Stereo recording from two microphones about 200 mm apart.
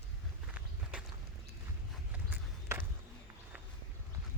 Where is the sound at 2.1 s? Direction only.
10° right (ahead or behind).